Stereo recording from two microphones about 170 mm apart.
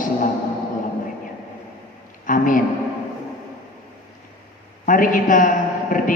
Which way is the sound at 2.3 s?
50° left (ahead or behind).